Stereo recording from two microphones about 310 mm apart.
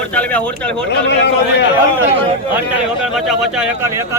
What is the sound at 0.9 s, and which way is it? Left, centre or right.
Speech, left.